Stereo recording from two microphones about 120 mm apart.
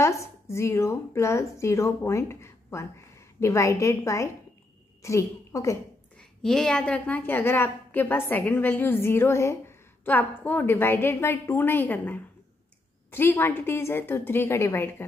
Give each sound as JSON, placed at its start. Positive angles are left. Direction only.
{"t": 0.0, "sound": "a woman's voice", "side_deg": 25}
{"t": 6.1, "sound": "a woman's voice", "side_deg": 5}